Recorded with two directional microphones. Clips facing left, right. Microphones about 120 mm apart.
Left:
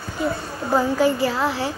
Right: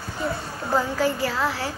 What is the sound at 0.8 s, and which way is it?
Speech, 15° left (ahead or behind).